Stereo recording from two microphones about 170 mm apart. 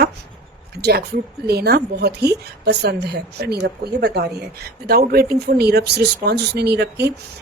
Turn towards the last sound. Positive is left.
turn(degrees=-75)  # may be behind; listen again after turning